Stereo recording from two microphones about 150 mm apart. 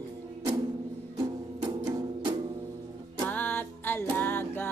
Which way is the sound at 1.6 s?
25° right (ahead or behind).